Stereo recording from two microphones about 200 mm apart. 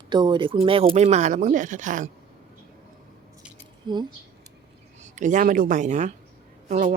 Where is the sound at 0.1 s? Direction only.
25° right (ahead or behind); by 2.0 s 40° right (ahead or behind).